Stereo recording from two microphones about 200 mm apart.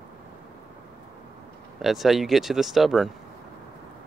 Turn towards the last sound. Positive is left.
turn(degrees=0)  # may be behind; listen again after turning